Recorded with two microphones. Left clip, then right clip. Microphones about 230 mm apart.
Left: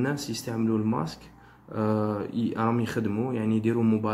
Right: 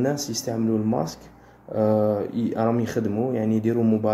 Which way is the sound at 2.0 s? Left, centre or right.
Centre.